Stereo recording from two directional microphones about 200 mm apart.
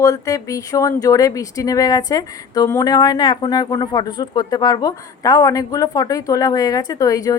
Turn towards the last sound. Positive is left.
turn(degrees=15)  # may be behind; listen again after turning